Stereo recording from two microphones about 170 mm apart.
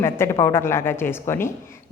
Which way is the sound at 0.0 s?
15° left (ahead or behind).